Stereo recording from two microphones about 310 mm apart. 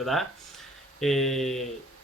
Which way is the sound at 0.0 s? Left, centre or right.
Centre.